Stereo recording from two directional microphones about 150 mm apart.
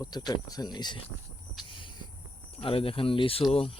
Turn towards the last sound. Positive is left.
turn(degrees=40)  # may be behind; listen again after turning